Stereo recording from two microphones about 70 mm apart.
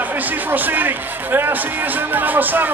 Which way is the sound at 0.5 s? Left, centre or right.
Right.